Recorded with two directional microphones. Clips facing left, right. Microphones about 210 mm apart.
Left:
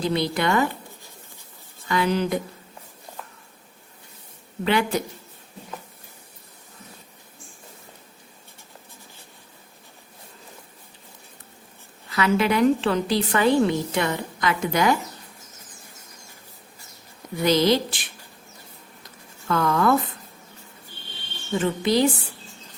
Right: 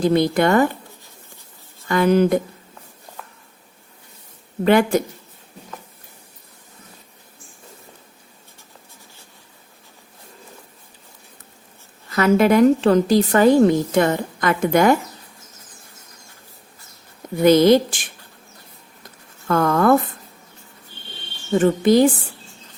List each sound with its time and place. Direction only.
0.0 s a woman's voice: 50° right (ahead or behind)
1.9 s a woman's voice: 50° right (ahead or behind)
4.6 s a woman's voice: 50° right (ahead or behind)
12.0 s a woman's voice: 45° right (ahead or behind)
17.4 s a woman's voice: 50° right (ahead or behind)
19.5 s a woman's voice: 50° right (ahead or behind)
21.5 s a woman's voice: 50° right (ahead or behind)